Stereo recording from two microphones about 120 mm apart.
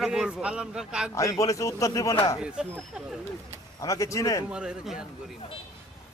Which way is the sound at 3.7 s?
25° left (ahead or behind).